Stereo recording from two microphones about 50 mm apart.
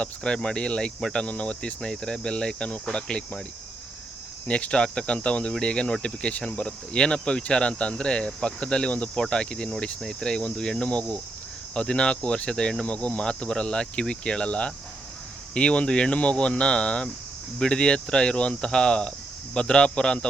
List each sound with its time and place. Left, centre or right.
0.0 s speech: centre
4.4 s speech: left
12.8 s speech: left